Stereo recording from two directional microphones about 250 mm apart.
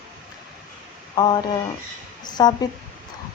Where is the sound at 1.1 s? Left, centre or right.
Centre.